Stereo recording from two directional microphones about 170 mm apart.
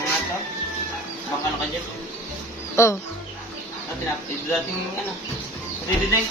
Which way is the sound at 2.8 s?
15° left (ahead or behind).